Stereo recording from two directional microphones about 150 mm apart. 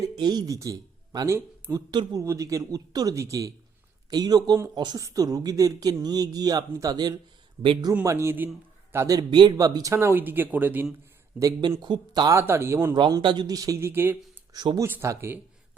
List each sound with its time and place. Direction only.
0.2 s speech: 25° right (ahead or behind)
8.0 s a man's voice: 15° right (ahead or behind)
11.3 s speech: 25° right (ahead or behind)
12.4 s a man's voice: 15° right (ahead or behind)
14.5 s speech: 25° right (ahead or behind)
14.8 s a man's voice: 15° right (ahead or behind)